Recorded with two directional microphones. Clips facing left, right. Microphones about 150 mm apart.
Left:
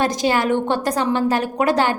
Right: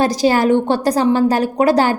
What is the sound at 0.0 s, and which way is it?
A woman's voice, 35° right (ahead or behind).